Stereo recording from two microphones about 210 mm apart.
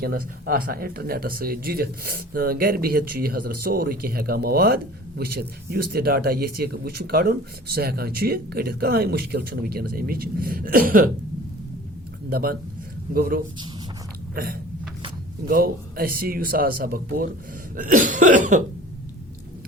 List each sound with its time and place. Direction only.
0.0 s speech: 45° right (ahead or behind)
12.3 s speech: 45° right (ahead or behind)
17.7 s cough: 40° right (ahead or behind)